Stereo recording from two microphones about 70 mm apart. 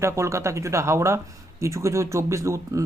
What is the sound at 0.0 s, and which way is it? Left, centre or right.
A man's voice, right.